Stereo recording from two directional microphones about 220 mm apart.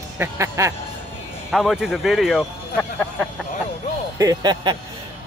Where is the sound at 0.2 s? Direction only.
15° right (ahead or behind).